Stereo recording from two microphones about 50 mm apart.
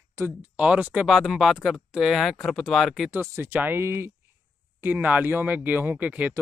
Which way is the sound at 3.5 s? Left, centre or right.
Right.